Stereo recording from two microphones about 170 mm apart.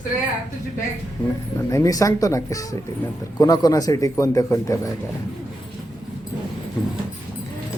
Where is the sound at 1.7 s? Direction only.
20° left (ahead or behind).